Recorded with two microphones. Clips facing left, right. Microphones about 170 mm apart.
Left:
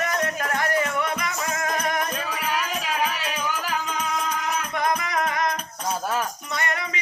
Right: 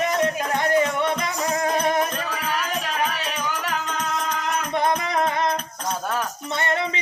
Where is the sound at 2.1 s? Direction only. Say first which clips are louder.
Right 1 dB; centre (ahead or behind).